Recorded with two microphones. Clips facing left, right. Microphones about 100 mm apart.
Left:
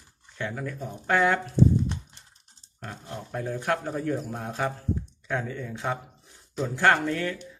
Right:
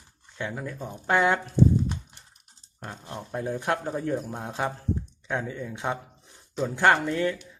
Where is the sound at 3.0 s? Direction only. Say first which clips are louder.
Right 1 dB; 20° right (ahead or behind).